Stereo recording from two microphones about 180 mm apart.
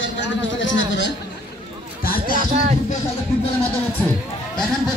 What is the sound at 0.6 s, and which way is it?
Speech, 90° left.